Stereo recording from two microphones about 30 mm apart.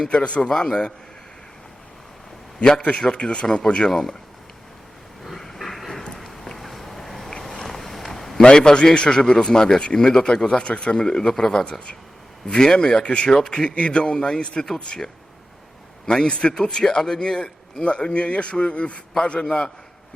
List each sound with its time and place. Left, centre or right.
0.1 s a man's voice: left
2.8 s speech: left
5.2 s train: centre
6.1 s a sound: centre
7.5 s walk: centre
7.8 s a sound: centre
8.4 s a man's voice: left
10.7 s speech: left
10.9 s a man's voice: left
13.1 s speech: left
13.3 s a man's voice: left